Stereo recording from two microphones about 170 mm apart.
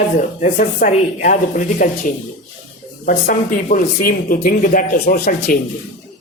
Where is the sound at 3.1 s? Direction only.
55° left (ahead or behind).